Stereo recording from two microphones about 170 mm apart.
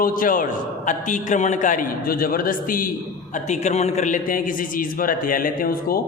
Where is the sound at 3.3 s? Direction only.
45° left (ahead or behind).